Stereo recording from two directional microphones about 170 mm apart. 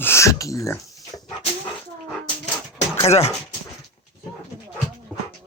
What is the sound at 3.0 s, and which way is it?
Speech, 35° left (ahead or behind).